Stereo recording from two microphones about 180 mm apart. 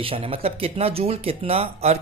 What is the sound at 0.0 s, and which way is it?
Speech, 30° right (ahead or behind).